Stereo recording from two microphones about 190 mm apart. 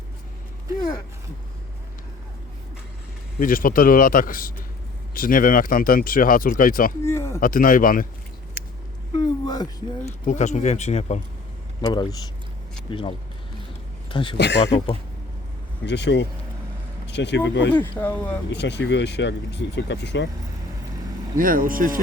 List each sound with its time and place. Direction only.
3.4 s speech: 45° left (ahead or behind)
7.0 s speech: 15° left (ahead or behind)
7.3 s speech: 45° left (ahead or behind)
9.1 s a sound: 20° left (ahead or behind)
10.1 s speech: 40° left (ahead or behind)
11.8 s speech: 20° left (ahead or behind)
14.3 s speech: 65° left (ahead or behind)
15.9 s speech: 65° left (ahead or behind)
17.7 s speech: 10° left (ahead or behind)
18.5 s speech: 65° left (ahead or behind)
21.3 s speech: 45° right (ahead or behind)